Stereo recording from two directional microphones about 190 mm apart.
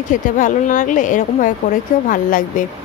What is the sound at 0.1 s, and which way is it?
A woman's voice, 40° left (ahead or behind).